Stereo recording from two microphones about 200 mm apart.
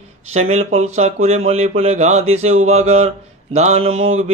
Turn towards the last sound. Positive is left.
turn(degrees=-30)  # may be behind; listen again after turning